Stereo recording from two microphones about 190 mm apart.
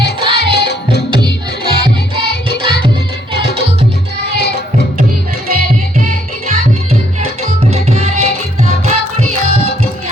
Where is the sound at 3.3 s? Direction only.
60° left (ahead or behind).